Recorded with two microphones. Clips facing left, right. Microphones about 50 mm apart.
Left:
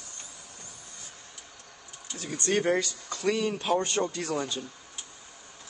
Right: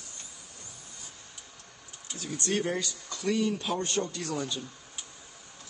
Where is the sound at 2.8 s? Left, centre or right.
Centre.